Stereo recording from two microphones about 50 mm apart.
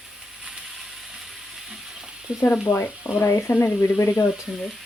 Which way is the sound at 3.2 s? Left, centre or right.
Left.